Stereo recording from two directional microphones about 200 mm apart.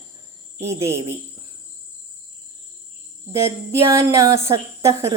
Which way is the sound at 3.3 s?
15° right (ahead or behind).